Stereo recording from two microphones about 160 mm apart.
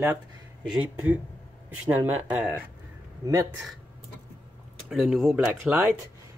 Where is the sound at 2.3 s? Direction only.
10° right (ahead or behind).